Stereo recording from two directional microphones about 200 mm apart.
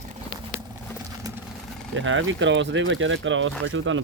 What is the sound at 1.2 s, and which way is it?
Vehicle, 20° right (ahead or behind).